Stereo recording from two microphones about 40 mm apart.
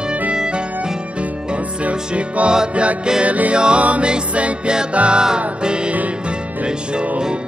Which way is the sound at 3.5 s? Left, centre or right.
Right.